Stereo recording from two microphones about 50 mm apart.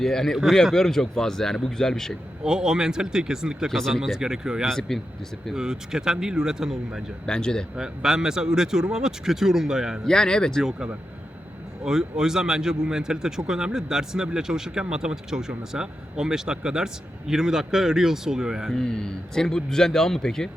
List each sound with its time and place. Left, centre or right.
0.0 s speech: centre
2.4 s speech: centre
3.7 s speech: centre
4.2 s speech: centre
4.7 s speech: centre
5.5 s speech: centre
7.3 s speech: centre
7.8 s speech: centre
10.1 s speech: centre
11.9 s speech: centre
18.9 s speech: centre